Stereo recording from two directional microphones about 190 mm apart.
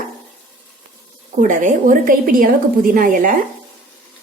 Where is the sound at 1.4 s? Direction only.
40° right (ahead or behind).